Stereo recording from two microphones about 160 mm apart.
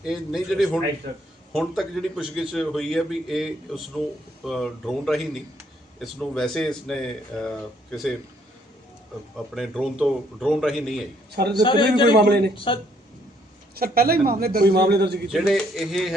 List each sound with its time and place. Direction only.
0.0 s a man's voice: centre (ahead or behind)
9.6 s a man's voice: centre (ahead or behind)
11.3 s a man's voice: 90° right
11.6 s a man's voice: 30° left (ahead or behind)
12.2 s a man's voice: 90° right
12.5 s a man's voice: 35° left (ahead or behind)
13.7 s a man's voice: 70° right (ahead or behind); by 15.2 s 90° right
15.3 s a man's voice: centre (ahead or behind)